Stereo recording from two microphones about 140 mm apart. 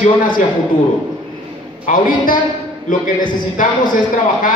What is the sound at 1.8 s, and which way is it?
Speech, 70° left (ahead or behind).